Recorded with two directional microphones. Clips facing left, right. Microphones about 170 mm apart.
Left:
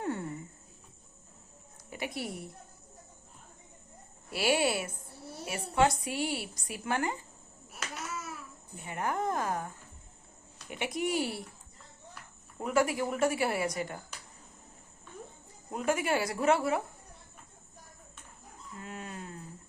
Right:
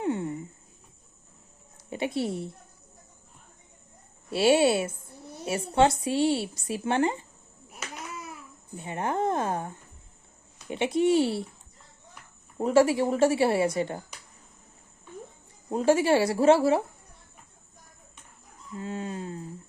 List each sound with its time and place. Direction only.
0.0 s a sound: 20° right (ahead or behind)
1.9 s a woman's voice: 25° right (ahead or behind)
4.3 s a woman's voice: 25° right (ahead or behind)
8.8 s a woman's voice: 25° right (ahead or behind)
12.5 s a woman's voice: 30° right (ahead or behind)
15.7 s a woman's voice: 30° right (ahead or behind)
18.8 s a woman's voice: 30° right (ahead or behind)